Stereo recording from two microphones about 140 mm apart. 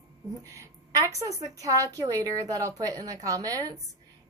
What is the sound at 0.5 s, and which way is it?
A woman's voice, 25° right (ahead or behind).